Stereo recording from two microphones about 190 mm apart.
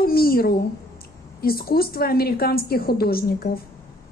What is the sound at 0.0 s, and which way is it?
A woman's voice, 50° left (ahead or behind).